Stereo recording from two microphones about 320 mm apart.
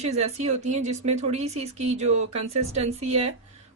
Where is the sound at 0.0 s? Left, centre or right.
Right.